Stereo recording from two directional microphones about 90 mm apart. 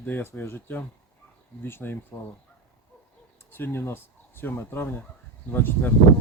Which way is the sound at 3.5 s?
25° left (ahead or behind).